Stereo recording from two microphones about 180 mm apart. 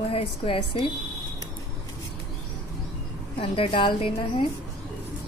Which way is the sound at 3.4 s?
30° left (ahead or behind).